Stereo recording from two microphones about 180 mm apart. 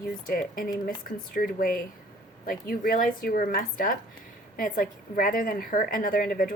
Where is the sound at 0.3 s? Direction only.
50° left (ahead or behind).